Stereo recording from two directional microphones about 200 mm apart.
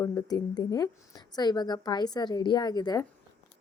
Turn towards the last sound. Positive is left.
turn(degrees=20)  # may be behind; listen again after turning